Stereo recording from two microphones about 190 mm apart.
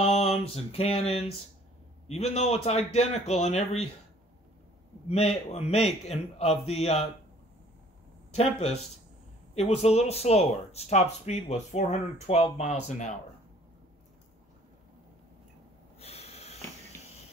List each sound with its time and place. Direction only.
0.0 s a sound: 35° left (ahead or behind)
0.5 s speech: 30° left (ahead or behind)
5.0 s speech: 30° left (ahead or behind)
8.4 s speech: 35° left (ahead or behind)
16.0 s snort: 35° left (ahead or behind)